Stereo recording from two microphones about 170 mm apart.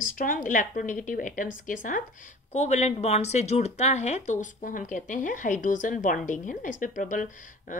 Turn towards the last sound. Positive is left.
turn(degrees=50)  # may be behind; listen again after turning